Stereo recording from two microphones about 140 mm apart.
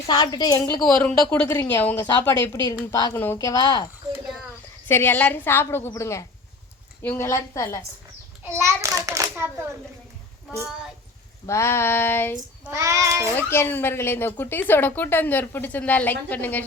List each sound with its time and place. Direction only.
0.1 s a woman's voice: 30° left (ahead or behind)
0.9 s speech: 10° left (ahead or behind)
2.5 s a woman's voice: 30° left (ahead or behind)
4.9 s a woman's voice: 15° left (ahead or behind)
8.4 s a child's voice: 20° right (ahead or behind)
11.4 s speech: 20° left (ahead or behind)
12.7 s a child's voice: 25° right (ahead or behind)
13.3 s speech: 15° left (ahead or behind)